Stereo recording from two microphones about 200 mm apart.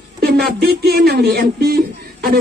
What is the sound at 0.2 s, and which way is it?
Speech, 50° right (ahead or behind).